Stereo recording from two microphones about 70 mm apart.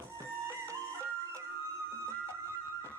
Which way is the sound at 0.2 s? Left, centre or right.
Right.